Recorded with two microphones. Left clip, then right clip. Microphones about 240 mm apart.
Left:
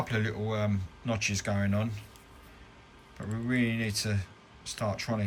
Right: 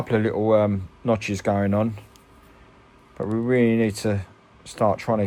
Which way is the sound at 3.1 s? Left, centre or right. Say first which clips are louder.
Right 11 dB; centre.